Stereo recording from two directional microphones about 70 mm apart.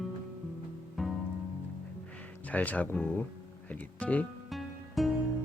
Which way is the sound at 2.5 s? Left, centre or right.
Left.